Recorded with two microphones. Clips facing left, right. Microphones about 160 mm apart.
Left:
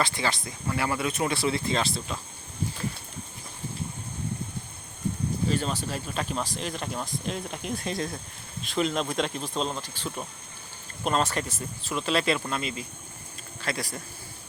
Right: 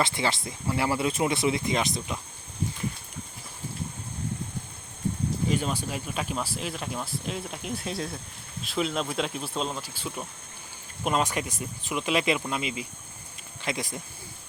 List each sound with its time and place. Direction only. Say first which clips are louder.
0.0 s speech: right 1 dB; 25° right (ahead or behind)
5.5 s speech: even; 10° right (ahead or behind)